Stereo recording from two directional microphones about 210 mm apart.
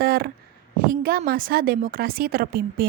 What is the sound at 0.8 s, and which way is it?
A woman's voice, 45° right (ahead or behind).